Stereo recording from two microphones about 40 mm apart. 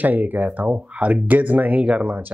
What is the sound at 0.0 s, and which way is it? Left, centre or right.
Speech, right.